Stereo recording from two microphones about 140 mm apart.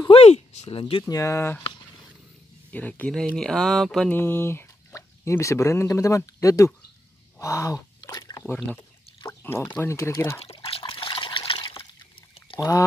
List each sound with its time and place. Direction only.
0.1 s a sound: 45° left (ahead or behind)
1.0 s speech: 25° left (ahead or behind)
2.7 s speech: 10° left (ahead or behind)
4.1 s speech: 15° left (ahead or behind)
7.3 s a sound: 20° left (ahead or behind)
9.4 s speech: 15° left (ahead or behind)
10.6 s liquid: 40° left (ahead or behind)
12.5 s speech: 25° left (ahead or behind)